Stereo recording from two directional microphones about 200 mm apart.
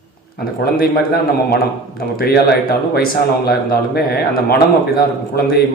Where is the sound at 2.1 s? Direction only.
50° left (ahead or behind).